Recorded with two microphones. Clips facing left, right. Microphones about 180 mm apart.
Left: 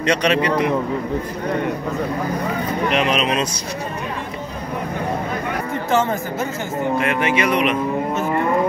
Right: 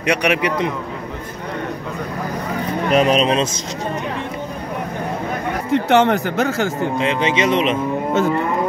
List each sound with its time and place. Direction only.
0.0 s a man's voice: 15° right (ahead or behind)
2.9 s speech: 40° right (ahead or behind)
5.7 s speech: 70° right (ahead or behind)
7.0 s speech: 20° right (ahead or behind)